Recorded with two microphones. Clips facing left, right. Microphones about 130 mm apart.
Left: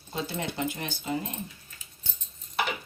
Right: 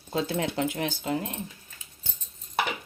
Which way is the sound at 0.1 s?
90° right.